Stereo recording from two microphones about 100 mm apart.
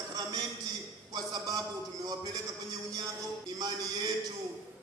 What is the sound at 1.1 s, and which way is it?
A man's voice, 40° right (ahead or behind).